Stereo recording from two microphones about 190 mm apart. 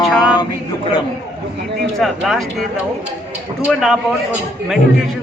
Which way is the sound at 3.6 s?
Centre (ahead or behind).